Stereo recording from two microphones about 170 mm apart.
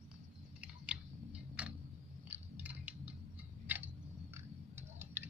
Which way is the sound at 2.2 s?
10° right (ahead or behind).